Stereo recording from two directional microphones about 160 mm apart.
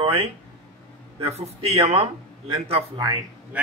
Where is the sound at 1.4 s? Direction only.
40° right (ahead or behind).